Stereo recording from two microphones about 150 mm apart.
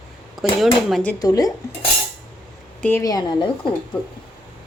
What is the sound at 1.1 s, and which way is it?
Speech, 25° left (ahead or behind).